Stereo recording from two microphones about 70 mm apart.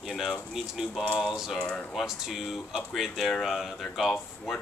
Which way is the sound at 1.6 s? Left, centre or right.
Centre.